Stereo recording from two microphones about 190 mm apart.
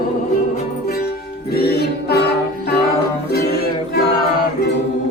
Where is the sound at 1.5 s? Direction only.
55° left (ahead or behind).